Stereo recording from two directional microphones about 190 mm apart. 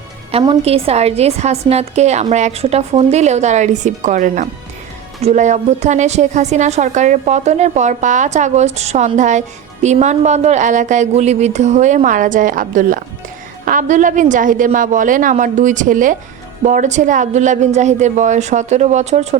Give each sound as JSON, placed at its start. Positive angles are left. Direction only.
{"t": 0.3, "sound": "a woman's voice", "side_deg": -30}